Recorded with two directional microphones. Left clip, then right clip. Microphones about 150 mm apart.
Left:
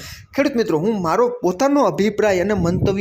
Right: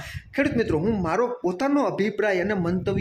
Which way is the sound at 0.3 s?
30° left (ahead or behind).